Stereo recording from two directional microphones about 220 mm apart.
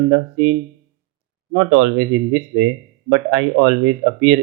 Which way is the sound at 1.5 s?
50° right (ahead or behind).